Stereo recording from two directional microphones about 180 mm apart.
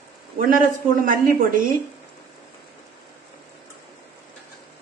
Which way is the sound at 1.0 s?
50° right (ahead or behind).